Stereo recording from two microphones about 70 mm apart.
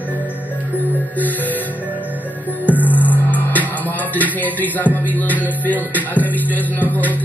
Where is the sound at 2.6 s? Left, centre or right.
Left.